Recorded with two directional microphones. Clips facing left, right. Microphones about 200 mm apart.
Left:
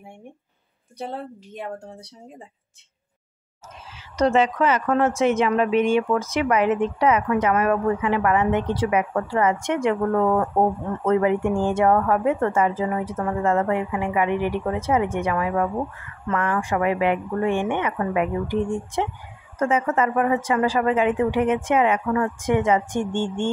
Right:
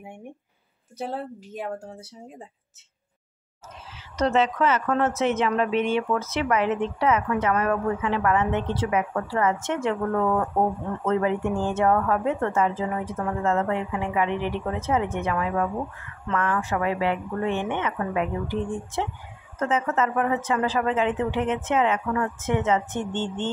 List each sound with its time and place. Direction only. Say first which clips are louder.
0.9 s a woman's voice: right 1 dB; 5° right (ahead or behind)
4.2 s speech: left 3 dB; 10° left (ahead or behind)
11.1 s speech: left 4 dB; 10° left (ahead or behind)